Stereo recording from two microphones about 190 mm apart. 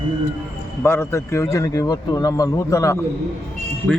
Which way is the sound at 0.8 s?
10° left (ahead or behind).